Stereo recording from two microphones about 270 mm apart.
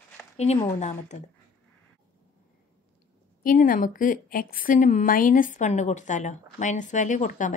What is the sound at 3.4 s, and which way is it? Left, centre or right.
A woman's voice, left.